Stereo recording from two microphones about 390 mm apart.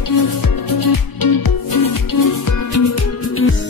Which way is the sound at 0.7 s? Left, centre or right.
Left.